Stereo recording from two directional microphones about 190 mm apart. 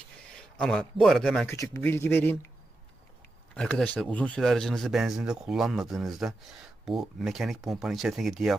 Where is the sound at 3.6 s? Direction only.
5° left (ahead or behind).